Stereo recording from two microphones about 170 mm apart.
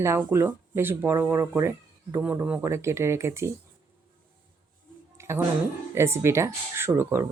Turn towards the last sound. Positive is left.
turn(degrees=-15)  # may be behind; listen again after turning